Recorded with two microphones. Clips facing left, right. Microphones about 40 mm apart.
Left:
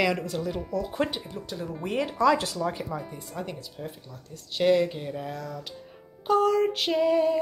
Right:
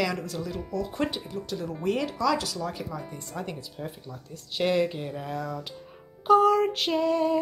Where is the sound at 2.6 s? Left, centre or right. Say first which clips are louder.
Left 3 dB; centre.